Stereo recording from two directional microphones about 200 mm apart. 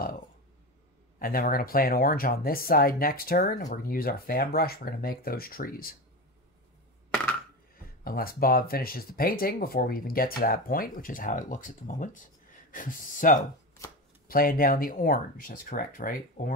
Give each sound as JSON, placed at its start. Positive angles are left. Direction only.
{"t": 1.2, "sound": "speech", "side_deg": 45}
{"t": 8.0, "sound": "speech", "side_deg": 45}